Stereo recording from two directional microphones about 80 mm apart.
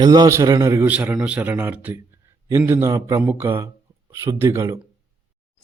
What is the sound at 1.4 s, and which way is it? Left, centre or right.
Speech, right.